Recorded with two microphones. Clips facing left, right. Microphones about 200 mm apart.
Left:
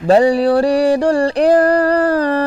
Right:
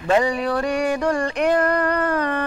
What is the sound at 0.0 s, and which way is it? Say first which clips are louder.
A man's voice: left 8 dB; 35° left (ahead or behind).